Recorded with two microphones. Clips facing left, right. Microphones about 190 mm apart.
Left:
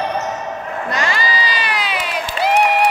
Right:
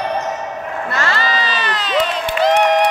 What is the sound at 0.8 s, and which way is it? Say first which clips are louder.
Crowd: right 1 dB; 15° left (ahead or behind).